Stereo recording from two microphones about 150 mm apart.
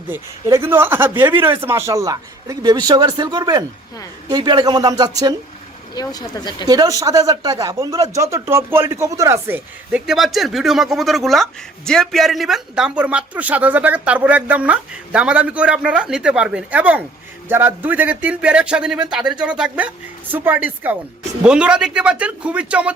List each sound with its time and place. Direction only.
0.1 s speech: 20° right (ahead or behind)
5.9 s speech: 25° left (ahead or behind)
6.7 s speech: 25° right (ahead or behind)
10.1 s speech: centre (ahead or behind)